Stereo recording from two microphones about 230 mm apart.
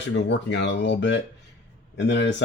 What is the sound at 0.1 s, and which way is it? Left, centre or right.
Speech, left.